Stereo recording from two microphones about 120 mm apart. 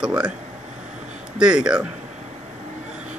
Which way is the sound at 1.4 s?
5° right (ahead or behind).